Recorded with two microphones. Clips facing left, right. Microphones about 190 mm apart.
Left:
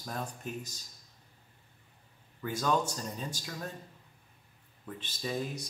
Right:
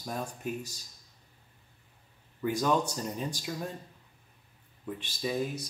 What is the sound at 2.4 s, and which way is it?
Speech, 15° right (ahead or behind).